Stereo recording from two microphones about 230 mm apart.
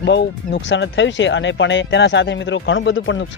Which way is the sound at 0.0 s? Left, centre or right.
Left.